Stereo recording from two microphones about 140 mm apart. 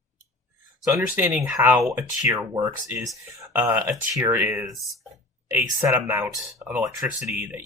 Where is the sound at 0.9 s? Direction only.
15° right (ahead or behind).